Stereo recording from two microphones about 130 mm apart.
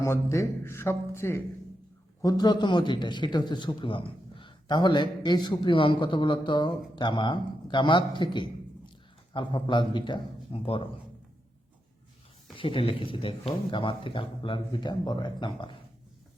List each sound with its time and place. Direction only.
0.0 s a man's voice: 20° left (ahead or behind)
2.2 s a man's voice: 35° left (ahead or behind)
12.5 s a man's voice: 45° left (ahead or behind)